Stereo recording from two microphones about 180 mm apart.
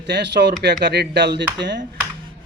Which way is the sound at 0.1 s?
75° right (ahead or behind).